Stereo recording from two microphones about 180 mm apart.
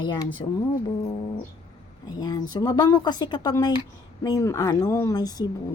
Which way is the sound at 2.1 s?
20° left (ahead or behind).